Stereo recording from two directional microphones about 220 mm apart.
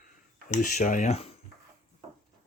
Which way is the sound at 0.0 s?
35° left (ahead or behind).